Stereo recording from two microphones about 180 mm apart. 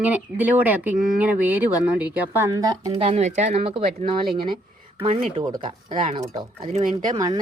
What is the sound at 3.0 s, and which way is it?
Speech, 35° right (ahead or behind).